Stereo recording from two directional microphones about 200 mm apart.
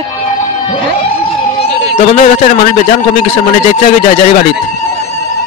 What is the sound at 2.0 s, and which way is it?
Speech, 40° left (ahead or behind).